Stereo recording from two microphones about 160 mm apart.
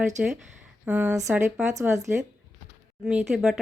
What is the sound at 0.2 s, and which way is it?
Speech, 5° right (ahead or behind).